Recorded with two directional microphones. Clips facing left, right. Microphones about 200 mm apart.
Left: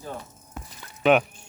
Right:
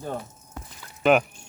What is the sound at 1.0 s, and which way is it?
Speech, centre (ahead or behind).